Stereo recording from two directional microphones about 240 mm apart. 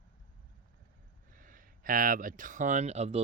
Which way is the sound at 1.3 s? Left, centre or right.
Right.